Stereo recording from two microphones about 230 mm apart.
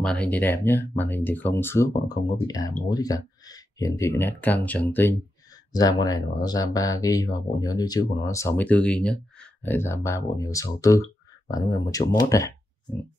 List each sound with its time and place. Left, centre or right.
0.0 s speech: centre